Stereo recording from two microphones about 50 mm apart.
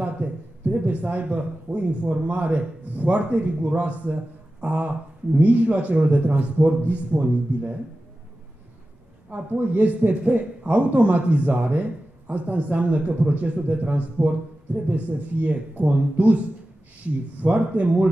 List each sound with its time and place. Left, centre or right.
0.0 s a man's voice: right
9.3 s a man's voice: right
17.4 s speech: right